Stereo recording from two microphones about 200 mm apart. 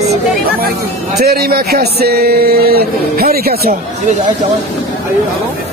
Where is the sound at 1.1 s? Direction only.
50° right (ahead or behind).